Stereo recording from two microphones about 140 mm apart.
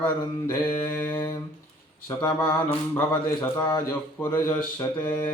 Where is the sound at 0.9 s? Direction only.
15° left (ahead or behind).